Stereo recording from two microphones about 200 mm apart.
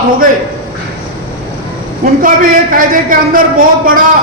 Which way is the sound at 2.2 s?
45° right (ahead or behind).